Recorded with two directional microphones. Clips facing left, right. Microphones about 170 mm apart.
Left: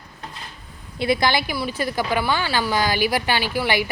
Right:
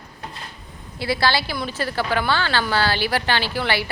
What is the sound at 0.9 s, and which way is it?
A woman's voice, 20° left (ahead or behind).